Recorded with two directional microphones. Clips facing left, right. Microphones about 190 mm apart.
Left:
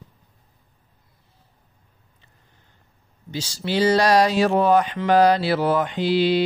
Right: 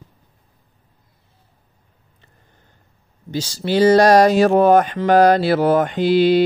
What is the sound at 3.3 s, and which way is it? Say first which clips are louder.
Speech: right 5 dB; 45° right (ahead or behind).